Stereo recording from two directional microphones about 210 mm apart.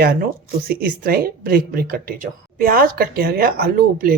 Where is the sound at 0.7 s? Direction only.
45° right (ahead or behind).